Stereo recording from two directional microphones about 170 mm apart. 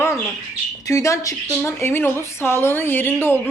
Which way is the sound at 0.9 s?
20° left (ahead or behind).